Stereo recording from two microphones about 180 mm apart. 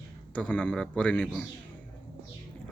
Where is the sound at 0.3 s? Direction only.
5° left (ahead or behind).